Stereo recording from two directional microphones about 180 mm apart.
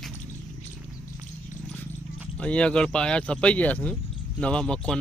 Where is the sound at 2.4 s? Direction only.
5° left (ahead or behind).